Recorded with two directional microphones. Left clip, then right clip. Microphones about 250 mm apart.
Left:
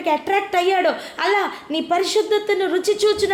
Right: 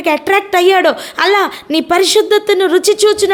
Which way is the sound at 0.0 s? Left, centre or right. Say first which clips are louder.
Right 7 dB; right.